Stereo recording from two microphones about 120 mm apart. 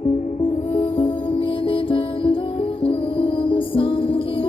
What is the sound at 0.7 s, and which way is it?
Music, 50° left (ahead or behind).